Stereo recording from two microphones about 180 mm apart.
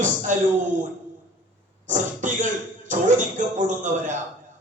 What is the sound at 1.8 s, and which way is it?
A man's voice, 45° right (ahead or behind).